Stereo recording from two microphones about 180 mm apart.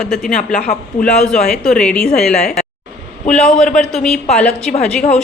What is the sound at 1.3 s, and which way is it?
A woman's voice, 5° left (ahead or behind).